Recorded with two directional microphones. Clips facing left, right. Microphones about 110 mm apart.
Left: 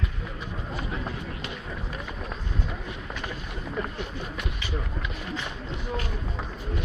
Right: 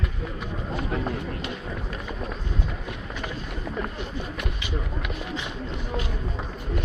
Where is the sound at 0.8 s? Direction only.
45° right (ahead or behind).